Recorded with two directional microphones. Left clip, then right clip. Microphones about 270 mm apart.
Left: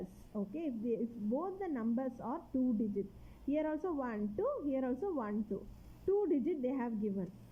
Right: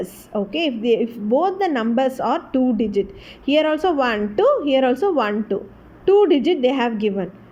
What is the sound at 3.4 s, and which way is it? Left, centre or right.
A woman's voice, right.